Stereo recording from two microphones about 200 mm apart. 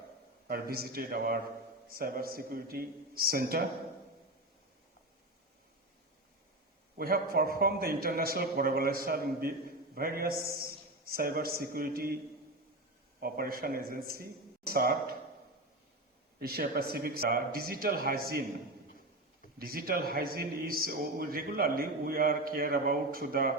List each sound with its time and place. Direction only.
0.4 s a man's voice: 50° right (ahead or behind)
6.9 s a man's voice: 45° right (ahead or behind)
16.4 s a man's voice: 50° right (ahead or behind)
19.5 s a man's voice: 45° right (ahead or behind)